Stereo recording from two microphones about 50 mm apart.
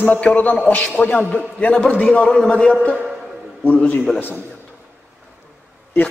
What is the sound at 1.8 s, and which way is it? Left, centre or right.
A man's voice, left.